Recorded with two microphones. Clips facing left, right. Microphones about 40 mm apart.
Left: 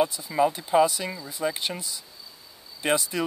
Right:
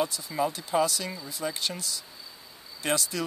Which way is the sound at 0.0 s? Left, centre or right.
Centre.